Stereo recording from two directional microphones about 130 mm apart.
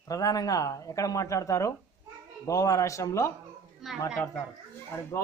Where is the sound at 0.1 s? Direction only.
25° left (ahead or behind).